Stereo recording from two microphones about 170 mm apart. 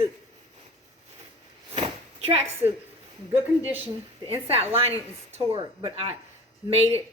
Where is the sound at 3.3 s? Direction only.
35° right (ahead or behind).